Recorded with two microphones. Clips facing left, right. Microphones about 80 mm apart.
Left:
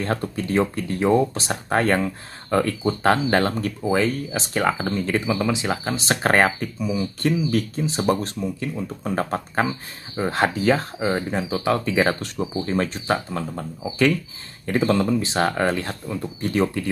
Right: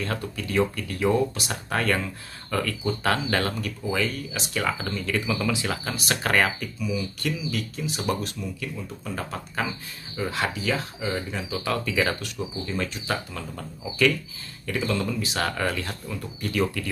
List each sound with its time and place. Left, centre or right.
0.0 s speech: left
11.6 s speech: left